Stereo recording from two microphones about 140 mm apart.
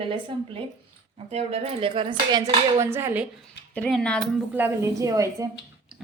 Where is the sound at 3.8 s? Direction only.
5° left (ahead or behind).